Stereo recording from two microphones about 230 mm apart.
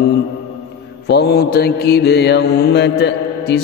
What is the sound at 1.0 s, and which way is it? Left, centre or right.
Mantra, left.